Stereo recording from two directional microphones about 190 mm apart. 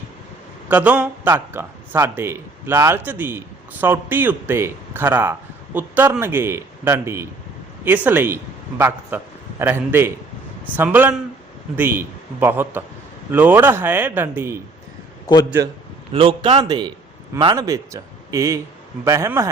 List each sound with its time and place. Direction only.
0.7 s a man's voice: 5° right (ahead or behind)
16.1 s a man's voice: 30° right (ahead or behind)